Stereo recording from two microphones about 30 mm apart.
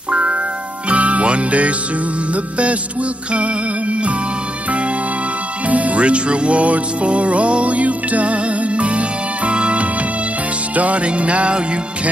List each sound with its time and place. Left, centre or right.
0.1 s music: right
5.7 s music: right